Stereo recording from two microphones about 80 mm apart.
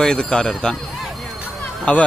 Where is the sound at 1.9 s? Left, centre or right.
Centre.